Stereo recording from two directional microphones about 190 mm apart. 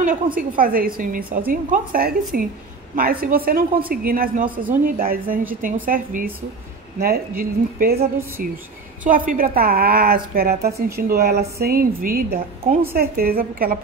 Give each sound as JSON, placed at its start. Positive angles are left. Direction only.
{"t": 0.0, "sound": "a woman's voice", "side_deg": -45}